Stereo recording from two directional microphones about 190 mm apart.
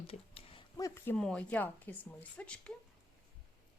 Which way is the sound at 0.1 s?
30° left (ahead or behind).